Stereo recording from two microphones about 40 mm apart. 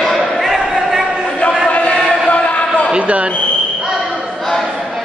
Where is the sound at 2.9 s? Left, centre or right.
Right.